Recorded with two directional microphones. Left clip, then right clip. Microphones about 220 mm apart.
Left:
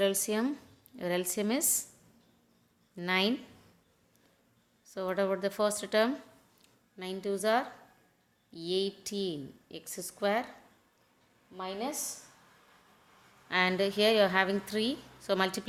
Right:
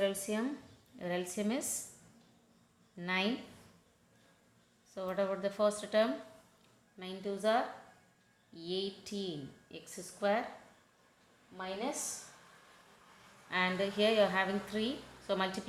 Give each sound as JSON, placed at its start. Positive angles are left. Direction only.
{"t": 0.0, "sound": "a woman's voice", "side_deg": 50}
{"t": 2.9, "sound": "speech", "side_deg": 50}
{"t": 4.9, "sound": "a woman's voice", "side_deg": 55}
{"t": 11.5, "sound": "a woman's voice", "side_deg": 50}
{"t": 13.5, "sound": "a woman's voice", "side_deg": 50}